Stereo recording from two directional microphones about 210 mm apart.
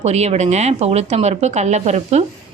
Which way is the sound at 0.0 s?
30° right (ahead or behind).